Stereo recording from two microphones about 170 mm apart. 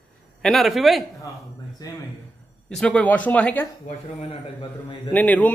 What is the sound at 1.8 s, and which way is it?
Speech, 20° left (ahead or behind).